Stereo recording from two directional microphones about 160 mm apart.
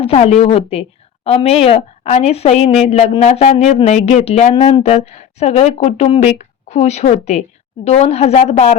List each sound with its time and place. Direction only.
0.0 s a woman's voice: 40° left (ahead or behind)